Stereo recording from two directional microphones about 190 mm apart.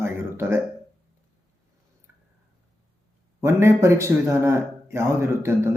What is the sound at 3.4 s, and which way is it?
A man's voice, 15° right (ahead or behind).